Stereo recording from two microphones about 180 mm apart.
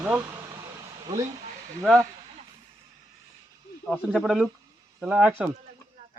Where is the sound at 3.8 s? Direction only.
Centre (ahead or behind).